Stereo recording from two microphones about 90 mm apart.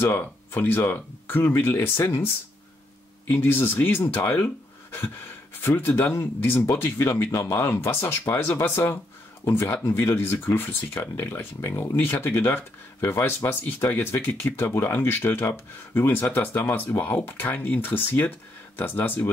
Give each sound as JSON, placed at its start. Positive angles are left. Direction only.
{"t": 0.0, "sound": "speech", "side_deg": 25}
{"t": 3.3, "sound": "speech", "side_deg": 25}
{"t": 5.6, "sound": "speech", "side_deg": 25}